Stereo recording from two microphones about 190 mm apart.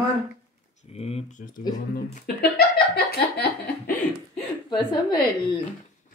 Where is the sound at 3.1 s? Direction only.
55° left (ahead or behind).